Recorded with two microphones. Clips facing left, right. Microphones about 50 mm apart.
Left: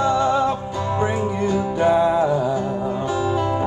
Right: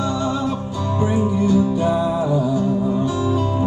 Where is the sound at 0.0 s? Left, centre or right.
Left.